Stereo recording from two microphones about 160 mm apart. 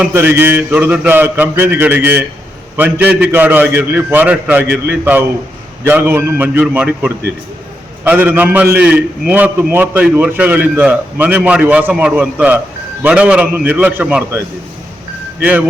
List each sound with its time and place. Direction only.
0.0 s a man's voice: 10° right (ahead or behind)